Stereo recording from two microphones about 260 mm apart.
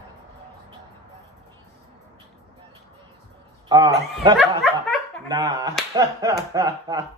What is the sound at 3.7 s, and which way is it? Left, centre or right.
A man's voice, centre.